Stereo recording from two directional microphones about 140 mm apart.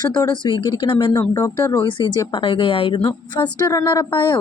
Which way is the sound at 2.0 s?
35° left (ahead or behind).